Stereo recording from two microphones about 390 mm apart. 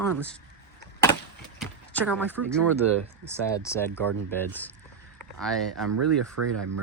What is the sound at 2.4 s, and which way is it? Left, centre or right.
Speech, right.